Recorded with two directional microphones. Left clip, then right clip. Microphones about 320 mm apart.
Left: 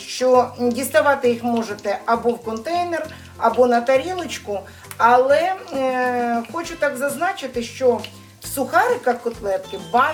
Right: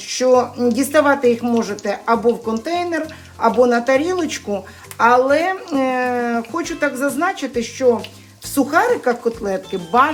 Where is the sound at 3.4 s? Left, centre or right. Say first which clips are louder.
Right 1 dB; centre.